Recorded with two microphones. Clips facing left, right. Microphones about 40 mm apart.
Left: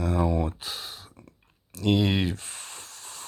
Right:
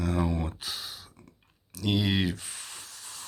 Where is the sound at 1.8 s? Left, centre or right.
Centre.